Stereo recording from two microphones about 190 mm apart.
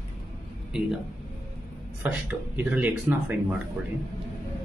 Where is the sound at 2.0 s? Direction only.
10° right (ahead or behind).